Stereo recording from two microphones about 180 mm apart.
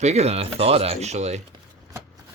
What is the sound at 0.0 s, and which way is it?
Speech, 35° right (ahead or behind).